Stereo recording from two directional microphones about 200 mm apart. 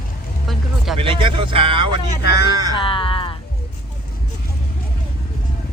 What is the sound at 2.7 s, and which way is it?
Music, 25° left (ahead or behind).